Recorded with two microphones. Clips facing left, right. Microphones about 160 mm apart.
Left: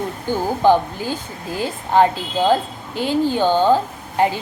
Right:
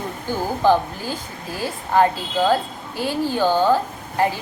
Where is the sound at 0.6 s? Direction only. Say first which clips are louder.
Left 2 dB; 20° left (ahead or behind).